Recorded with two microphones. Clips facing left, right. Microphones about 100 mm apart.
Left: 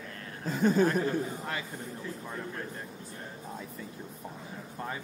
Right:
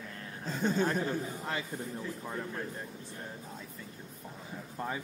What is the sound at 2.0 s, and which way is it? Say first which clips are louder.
Speech: right 1 dB; 10° right (ahead or behind).